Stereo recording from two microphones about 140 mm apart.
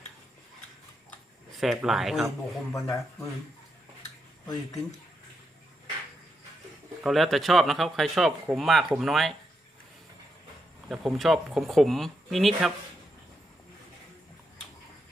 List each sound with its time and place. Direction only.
1.5 s speech: centre (ahead or behind)
2.7 s speech: 25° left (ahead or behind)
7.0 s speech: centre (ahead or behind)
10.8 s speech: centre (ahead or behind)